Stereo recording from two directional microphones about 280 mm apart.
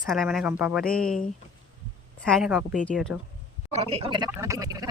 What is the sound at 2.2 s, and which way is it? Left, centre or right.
Speech, centre.